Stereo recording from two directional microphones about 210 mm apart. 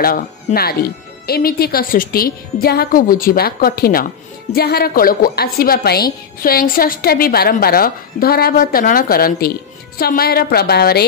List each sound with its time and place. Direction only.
0.0 s speech: 45° left (ahead or behind)